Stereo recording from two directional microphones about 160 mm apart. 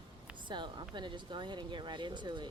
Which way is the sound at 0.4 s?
30° right (ahead or behind).